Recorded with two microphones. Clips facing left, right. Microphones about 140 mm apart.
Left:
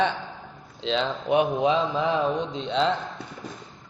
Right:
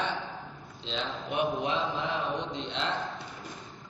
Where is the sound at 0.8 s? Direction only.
90° left.